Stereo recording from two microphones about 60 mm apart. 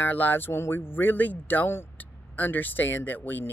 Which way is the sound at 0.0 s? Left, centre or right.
Left.